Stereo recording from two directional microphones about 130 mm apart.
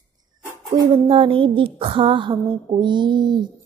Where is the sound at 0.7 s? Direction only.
40° right (ahead or behind).